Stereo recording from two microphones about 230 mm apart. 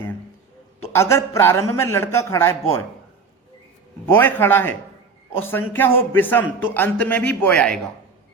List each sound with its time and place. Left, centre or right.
0.9 s a man's voice: centre
4.0 s a man's voice: centre